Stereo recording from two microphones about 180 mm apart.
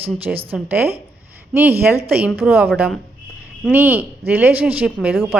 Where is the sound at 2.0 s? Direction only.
10° right (ahead or behind).